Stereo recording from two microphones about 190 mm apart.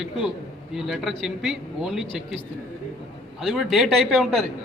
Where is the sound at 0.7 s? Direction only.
Centre (ahead or behind).